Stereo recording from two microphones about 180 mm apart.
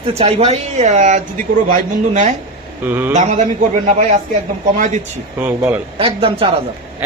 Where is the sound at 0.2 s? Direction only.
35° right (ahead or behind).